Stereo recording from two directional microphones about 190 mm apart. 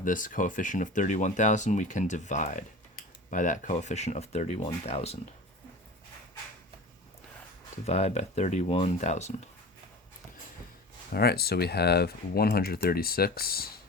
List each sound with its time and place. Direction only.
0.0 s speech: 45° left (ahead or behind)
7.9 s speech: 35° left (ahead or behind)
11.1 s speech: 55° left (ahead or behind)